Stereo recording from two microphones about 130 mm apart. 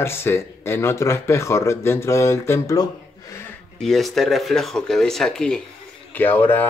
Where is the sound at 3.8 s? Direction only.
Centre (ahead or behind).